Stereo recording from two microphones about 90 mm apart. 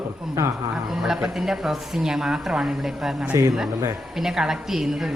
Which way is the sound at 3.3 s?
35° right (ahead or behind).